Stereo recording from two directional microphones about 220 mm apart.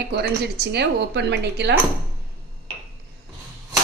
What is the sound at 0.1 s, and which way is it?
Speech, 50° right (ahead or behind).